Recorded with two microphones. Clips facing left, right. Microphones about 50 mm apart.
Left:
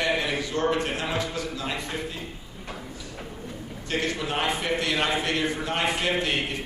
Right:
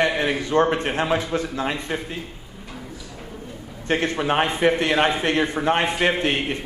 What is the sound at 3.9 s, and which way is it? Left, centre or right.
A man's voice, right.